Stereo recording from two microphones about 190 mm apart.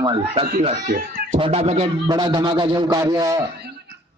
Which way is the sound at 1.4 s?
30° right (ahead or behind).